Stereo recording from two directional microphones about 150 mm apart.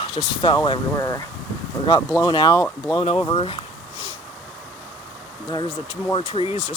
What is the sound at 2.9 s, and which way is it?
Speech, 35° left (ahead or behind).